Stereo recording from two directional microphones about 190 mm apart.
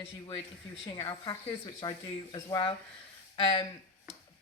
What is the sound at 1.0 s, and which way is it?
Speech, 25° left (ahead or behind).